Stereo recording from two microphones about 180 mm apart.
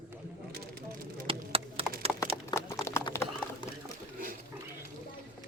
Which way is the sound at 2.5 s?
15° left (ahead or behind).